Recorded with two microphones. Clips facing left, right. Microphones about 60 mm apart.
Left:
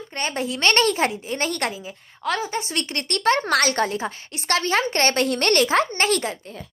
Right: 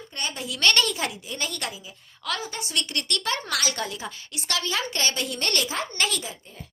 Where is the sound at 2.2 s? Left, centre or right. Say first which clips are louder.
Left 7 dB; left.